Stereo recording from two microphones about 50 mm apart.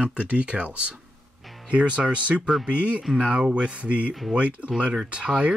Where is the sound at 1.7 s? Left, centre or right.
Right.